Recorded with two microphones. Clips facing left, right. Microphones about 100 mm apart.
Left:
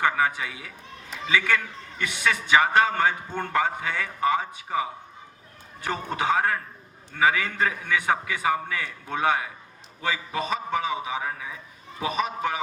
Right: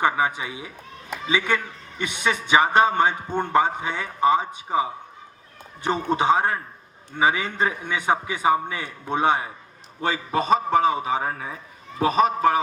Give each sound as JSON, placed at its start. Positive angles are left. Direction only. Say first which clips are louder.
{"t": 0.0, "sound": "a man's voice", "louder": "right 2 dB", "side_deg": -20}
{"t": 10.0, "sound": "a man's voice", "louder": "right 4 dB", "side_deg": -35}